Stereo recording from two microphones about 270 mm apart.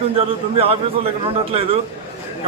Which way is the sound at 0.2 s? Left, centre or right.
Right.